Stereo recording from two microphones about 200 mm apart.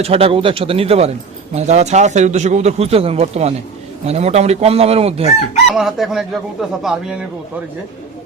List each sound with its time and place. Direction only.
0.0 s a man's voice: 30° right (ahead or behind)
5.7 s speech: centre (ahead or behind)